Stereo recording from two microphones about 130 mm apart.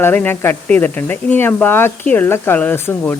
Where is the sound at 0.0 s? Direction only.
15° left (ahead or behind).